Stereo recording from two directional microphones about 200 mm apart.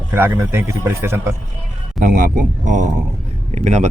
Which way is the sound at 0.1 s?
10° right (ahead or behind).